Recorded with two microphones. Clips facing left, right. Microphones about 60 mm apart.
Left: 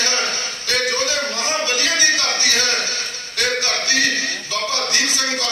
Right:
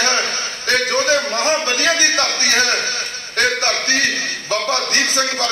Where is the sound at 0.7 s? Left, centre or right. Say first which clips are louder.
Right 5 dB; right.